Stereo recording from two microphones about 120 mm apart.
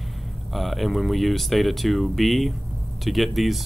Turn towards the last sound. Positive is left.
turn(degrees=0)  # may be behind; listen again after turning